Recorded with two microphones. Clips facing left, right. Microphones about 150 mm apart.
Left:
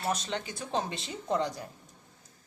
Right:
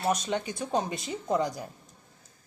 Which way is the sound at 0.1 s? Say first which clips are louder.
Right 4 dB; 15° right (ahead or behind).